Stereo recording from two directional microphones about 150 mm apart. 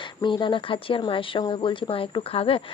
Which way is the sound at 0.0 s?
30° left (ahead or behind).